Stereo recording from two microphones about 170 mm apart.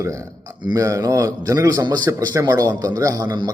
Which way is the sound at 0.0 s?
20° right (ahead or behind).